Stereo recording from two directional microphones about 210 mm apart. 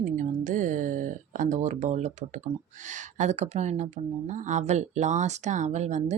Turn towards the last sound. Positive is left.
turn(degrees=-35)  # may be behind; listen again after turning